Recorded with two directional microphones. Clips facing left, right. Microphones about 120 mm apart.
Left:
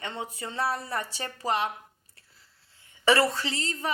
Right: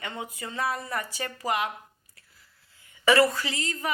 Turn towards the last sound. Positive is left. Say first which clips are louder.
# even
turn(degrees=30)  # may be behind; listen again after turning